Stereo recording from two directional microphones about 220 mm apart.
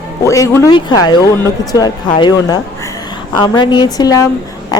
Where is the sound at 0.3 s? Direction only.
15° left (ahead or behind).